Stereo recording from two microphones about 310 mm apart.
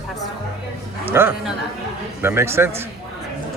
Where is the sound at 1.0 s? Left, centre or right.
Centre.